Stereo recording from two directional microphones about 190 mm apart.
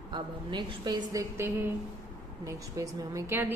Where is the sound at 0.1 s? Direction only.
25° right (ahead or behind).